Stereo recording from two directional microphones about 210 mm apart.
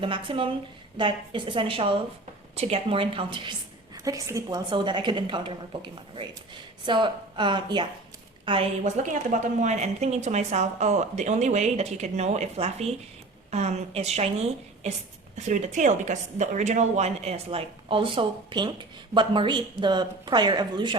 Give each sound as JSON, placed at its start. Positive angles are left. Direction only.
{"t": 0.0, "sound": "a woman's voice", "side_deg": -25}
{"t": 9.0, "sound": "a woman's voice", "side_deg": -35}